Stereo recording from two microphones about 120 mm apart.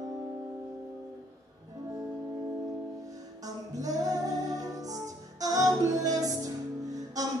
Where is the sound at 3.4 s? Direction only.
30° right (ahead or behind).